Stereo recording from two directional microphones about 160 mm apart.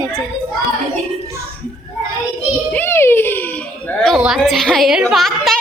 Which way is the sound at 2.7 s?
15° left (ahead or behind).